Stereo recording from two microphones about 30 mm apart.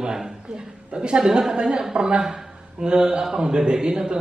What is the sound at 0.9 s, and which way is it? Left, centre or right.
A man's voice, right.